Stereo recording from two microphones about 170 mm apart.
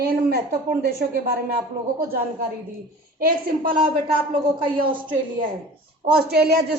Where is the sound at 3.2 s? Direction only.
60° right (ahead or behind).